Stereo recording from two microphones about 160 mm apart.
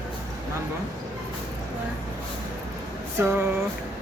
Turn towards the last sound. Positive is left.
turn(degrees=-15)  # may be behind; listen again after turning